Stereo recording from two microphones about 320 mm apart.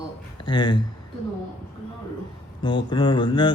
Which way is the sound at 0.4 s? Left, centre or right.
Centre.